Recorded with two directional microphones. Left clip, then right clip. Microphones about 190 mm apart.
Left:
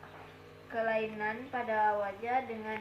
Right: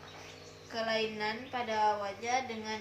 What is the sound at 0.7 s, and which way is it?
A woman's voice, 15° right (ahead or behind).